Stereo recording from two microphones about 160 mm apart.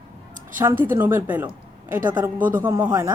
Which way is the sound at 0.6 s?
15° right (ahead or behind).